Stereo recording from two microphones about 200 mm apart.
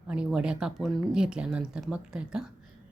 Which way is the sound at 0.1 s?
5° right (ahead or behind).